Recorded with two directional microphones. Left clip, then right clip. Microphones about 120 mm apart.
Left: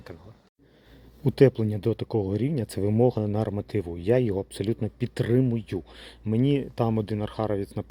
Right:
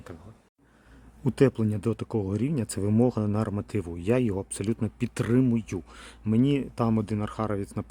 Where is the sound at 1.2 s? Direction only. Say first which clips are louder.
Left 3 dB; 15° right (ahead or behind).